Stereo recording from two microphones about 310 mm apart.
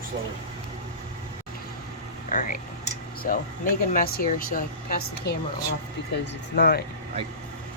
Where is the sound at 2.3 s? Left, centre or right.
Left.